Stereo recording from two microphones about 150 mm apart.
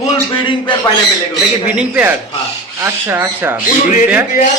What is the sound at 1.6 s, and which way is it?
Speech, 10° right (ahead or behind).